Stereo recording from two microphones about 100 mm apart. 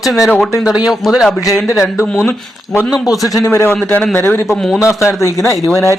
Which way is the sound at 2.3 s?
20° left (ahead or behind).